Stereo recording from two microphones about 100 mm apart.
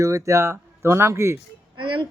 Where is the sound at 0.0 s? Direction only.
35° right (ahead or behind).